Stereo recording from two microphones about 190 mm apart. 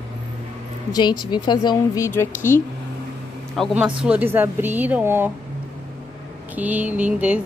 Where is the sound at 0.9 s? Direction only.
25° left (ahead or behind).